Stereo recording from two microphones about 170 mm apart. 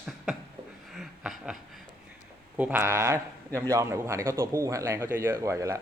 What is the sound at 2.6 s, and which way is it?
A man's voice, 10° right (ahead or behind).